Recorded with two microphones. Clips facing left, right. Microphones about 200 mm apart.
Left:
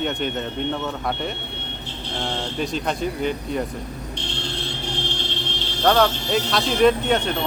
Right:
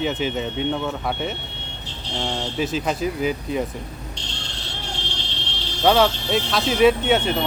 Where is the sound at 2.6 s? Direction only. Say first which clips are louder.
Right 2 dB; 5° right (ahead or behind).